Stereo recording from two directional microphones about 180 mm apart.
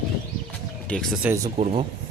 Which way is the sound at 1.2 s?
15° right (ahead or behind).